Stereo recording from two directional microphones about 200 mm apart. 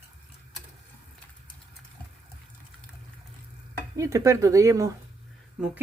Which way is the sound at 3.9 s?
15° right (ahead or behind).